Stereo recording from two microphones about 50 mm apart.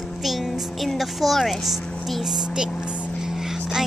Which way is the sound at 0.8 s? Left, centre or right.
Centre.